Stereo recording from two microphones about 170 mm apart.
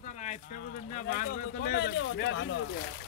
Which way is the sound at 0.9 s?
55° left (ahead or behind).